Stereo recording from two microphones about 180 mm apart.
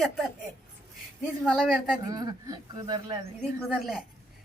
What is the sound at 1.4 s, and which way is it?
Speech, centre (ahead or behind).